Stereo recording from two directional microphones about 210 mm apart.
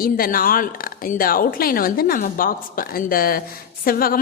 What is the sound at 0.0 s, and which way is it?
A woman's voice, 45° left (ahead or behind).